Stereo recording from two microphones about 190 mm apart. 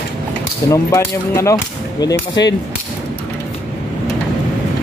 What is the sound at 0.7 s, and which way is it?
Speech, 15° left (ahead or behind).